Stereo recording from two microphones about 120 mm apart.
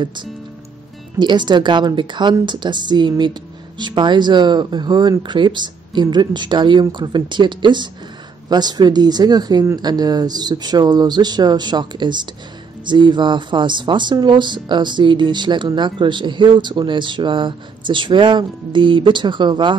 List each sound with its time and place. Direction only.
0.0 s speech: 40° right (ahead or behind)